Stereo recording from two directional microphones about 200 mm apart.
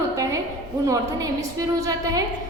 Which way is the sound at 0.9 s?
15° right (ahead or behind).